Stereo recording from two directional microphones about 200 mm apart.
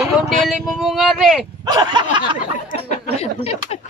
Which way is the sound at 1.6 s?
20° right (ahead or behind).